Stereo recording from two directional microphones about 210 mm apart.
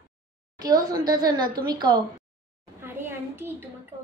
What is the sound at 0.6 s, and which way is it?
A woman's voice, 20° right (ahead or behind).